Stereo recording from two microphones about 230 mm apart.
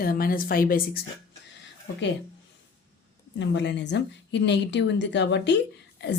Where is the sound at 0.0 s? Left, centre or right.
Left.